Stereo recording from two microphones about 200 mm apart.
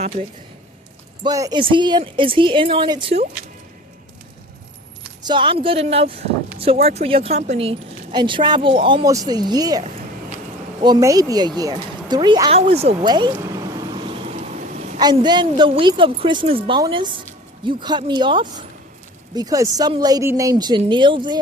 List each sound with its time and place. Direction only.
1.2 s speech: 20° right (ahead or behind)
5.2 s speech: 25° right (ahead or behind)
10.8 s speech: 20° right (ahead or behind)
14.3 s vehicle: 40° right (ahead or behind)
14.9 s speech: 20° right (ahead or behind)